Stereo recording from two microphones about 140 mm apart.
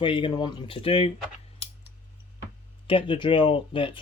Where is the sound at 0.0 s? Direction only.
35° left (ahead or behind).